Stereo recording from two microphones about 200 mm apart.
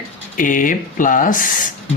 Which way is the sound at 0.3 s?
40° left (ahead or behind).